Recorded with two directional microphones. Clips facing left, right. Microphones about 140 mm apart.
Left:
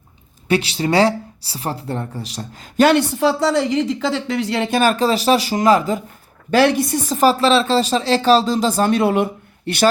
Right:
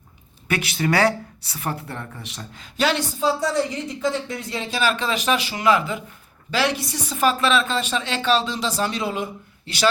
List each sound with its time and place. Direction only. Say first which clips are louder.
0.4 s speech: left 5 dB; 30° left (ahead or behind)
6.5 s speech: left 9 dB; 50° left (ahead or behind)